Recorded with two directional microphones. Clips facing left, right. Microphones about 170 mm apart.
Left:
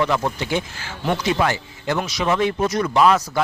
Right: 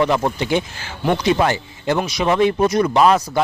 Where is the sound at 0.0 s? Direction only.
20° right (ahead or behind).